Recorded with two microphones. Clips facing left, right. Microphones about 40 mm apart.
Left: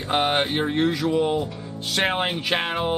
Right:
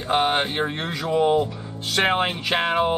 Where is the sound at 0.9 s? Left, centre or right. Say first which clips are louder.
Right 2 dB; centre.